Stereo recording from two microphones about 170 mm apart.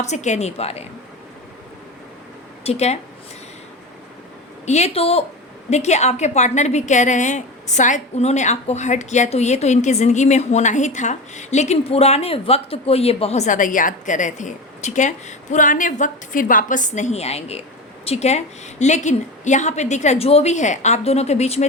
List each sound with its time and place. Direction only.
0.0 s a woman's voice: 45° left (ahead or behind)
2.6 s a woman's voice: 40° left (ahead or behind)
4.6 s a woman's voice: 40° left (ahead or behind)